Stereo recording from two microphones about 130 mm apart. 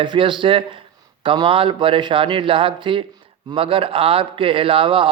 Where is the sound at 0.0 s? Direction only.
40° right (ahead or behind).